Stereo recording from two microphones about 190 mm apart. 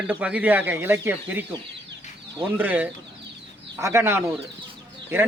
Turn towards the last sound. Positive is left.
turn(degrees=-15)  # may be behind; listen again after turning